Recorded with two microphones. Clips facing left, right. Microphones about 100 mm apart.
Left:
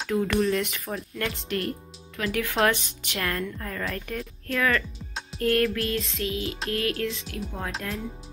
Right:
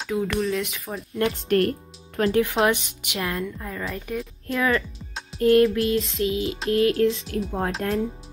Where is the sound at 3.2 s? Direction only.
10° right (ahead or behind).